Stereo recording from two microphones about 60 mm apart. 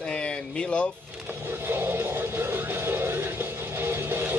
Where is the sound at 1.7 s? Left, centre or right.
Right.